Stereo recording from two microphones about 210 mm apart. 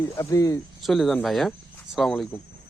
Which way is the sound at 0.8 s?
Centre (ahead or behind).